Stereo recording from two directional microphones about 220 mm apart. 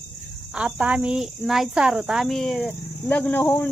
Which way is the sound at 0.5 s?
5° right (ahead or behind).